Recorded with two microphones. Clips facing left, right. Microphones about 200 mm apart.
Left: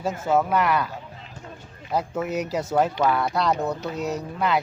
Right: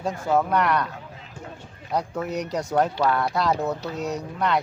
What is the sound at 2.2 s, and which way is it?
Speech, 5° left (ahead or behind).